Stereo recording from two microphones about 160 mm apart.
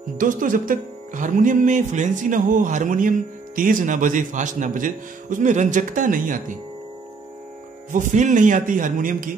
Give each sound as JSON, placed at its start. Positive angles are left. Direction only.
{"t": 0.2, "sound": "music", "side_deg": -55}
{"t": 7.9, "sound": "a man's voice", "side_deg": -50}